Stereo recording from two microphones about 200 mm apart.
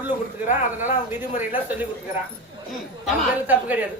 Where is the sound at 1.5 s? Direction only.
10° right (ahead or behind).